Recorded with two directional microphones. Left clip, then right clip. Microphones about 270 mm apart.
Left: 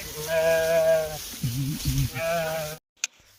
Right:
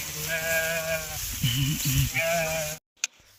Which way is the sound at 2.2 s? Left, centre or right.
Left.